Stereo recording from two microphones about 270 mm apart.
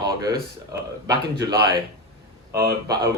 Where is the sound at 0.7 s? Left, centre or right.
Centre.